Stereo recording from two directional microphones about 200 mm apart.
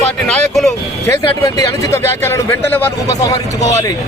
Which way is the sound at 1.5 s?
15° left (ahead or behind).